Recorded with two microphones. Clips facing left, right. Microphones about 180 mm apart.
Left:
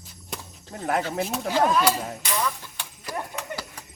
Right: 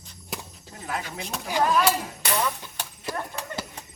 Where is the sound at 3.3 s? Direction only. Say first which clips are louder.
Even; 25° right (ahead or behind).